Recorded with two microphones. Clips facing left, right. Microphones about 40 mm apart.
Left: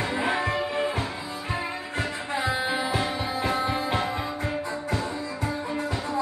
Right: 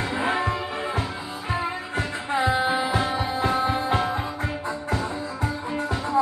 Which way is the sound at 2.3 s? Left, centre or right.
Right.